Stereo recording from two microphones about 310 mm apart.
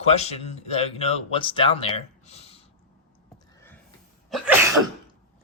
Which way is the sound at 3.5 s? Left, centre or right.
Centre.